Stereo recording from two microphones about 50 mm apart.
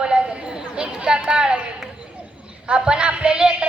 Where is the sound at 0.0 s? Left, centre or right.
Centre.